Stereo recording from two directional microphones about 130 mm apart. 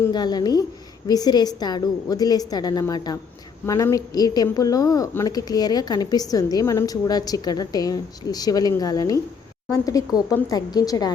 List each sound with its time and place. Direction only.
0.1 s speech: 30° left (ahead or behind)